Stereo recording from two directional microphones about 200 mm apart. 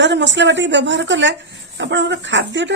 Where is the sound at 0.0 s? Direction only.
65° right (ahead or behind).